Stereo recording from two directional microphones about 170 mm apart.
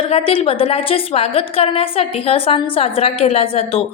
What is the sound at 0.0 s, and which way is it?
A woman's voice, 35° left (ahead or behind).